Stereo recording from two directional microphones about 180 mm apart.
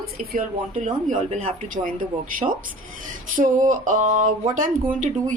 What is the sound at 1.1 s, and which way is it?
Speech, 40° right (ahead or behind).